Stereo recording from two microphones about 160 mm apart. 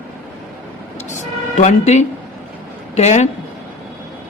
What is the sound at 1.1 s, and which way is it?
A man's voice, 50° left (ahead or behind).